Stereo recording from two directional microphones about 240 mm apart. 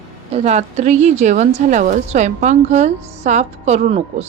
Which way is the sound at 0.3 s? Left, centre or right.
Right.